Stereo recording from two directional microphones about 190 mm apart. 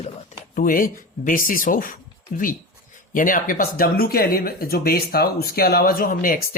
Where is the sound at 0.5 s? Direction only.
50° left (ahead or behind).